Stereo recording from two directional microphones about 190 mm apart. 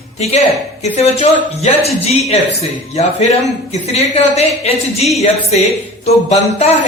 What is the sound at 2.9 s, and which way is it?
Speech, 35° left (ahead or behind).